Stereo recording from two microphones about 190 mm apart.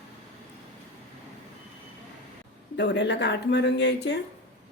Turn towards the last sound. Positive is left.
turn(degrees=65)  # may be behind; listen again after turning